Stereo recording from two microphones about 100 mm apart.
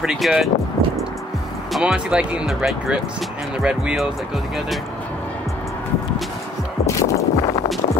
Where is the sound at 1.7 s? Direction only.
10° right (ahead or behind).